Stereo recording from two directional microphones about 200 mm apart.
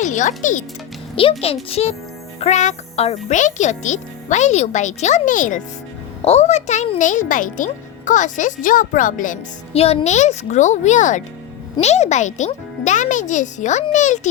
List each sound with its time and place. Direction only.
0.0 s a child's voice: 40° left (ahead or behind)
1.1 s a child's voice: 30° left (ahead or behind)